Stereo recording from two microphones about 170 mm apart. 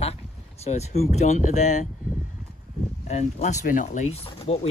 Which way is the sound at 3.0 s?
45° left (ahead or behind).